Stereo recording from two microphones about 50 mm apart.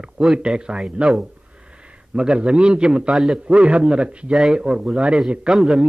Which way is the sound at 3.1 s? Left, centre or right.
Centre.